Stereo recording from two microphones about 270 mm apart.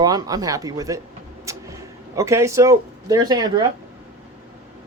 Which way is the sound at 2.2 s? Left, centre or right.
Centre.